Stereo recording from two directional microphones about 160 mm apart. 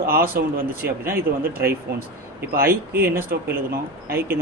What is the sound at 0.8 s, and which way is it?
Speech, 15° right (ahead or behind).